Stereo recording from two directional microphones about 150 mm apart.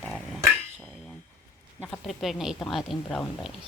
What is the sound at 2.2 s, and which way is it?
A woman's voice, centre (ahead or behind).